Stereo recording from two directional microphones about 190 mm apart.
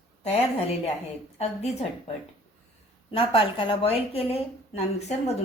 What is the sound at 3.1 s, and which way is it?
A woman's voice, 25° left (ahead or behind).